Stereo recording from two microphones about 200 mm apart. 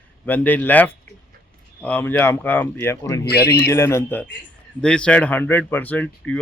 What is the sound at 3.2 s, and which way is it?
Speech, 55° left (ahead or behind).